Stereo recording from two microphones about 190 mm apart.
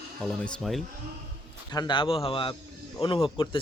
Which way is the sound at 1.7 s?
20° left (ahead or behind).